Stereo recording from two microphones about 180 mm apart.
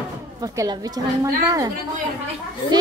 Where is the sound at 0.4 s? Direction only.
20° right (ahead or behind).